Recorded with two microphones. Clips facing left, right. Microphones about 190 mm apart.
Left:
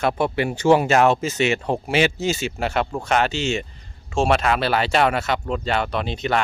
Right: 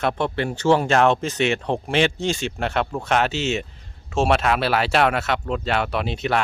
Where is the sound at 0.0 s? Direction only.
10° left (ahead or behind).